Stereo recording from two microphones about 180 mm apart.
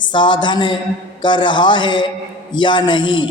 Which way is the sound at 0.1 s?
25° left (ahead or behind).